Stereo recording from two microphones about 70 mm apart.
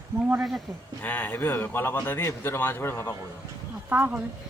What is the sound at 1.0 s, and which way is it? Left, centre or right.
Speech, left.